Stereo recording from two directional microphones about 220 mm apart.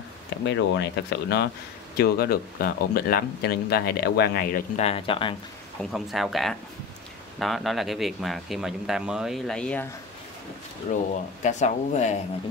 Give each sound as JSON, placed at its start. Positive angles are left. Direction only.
{"t": 0.5, "sound": "speech", "side_deg": 55}
{"t": 4.8, "sound": "speech", "side_deg": 25}
{"t": 5.8, "sound": "speech", "side_deg": 0}
{"t": 10.9, "sound": "speech", "side_deg": 35}